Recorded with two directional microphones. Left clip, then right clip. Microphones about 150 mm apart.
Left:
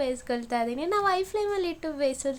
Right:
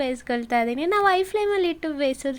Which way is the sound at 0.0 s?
25° right (ahead or behind).